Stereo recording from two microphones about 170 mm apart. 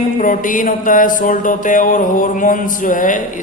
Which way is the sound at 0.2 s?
50° left (ahead or behind).